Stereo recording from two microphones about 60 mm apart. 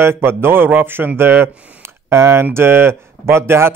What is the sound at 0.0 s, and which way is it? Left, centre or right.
Speech, right.